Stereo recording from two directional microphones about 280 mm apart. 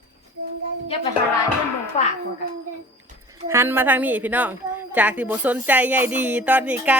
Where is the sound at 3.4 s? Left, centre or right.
Centre.